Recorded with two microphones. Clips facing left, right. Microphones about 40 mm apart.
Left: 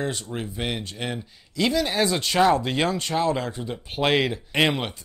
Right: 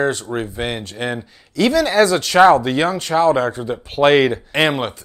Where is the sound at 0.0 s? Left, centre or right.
Right.